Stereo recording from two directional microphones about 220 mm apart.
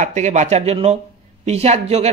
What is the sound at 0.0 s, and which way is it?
Speech, 30° right (ahead or behind).